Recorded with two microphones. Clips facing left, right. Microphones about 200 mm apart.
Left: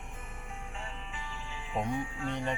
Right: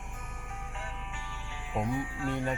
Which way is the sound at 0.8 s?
80° right.